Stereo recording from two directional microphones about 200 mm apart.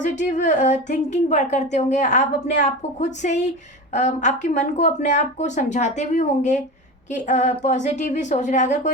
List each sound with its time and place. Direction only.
0.0 s speech: 40° left (ahead or behind)